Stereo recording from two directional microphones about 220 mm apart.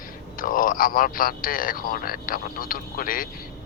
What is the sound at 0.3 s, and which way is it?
Speech, 40° left (ahead or behind).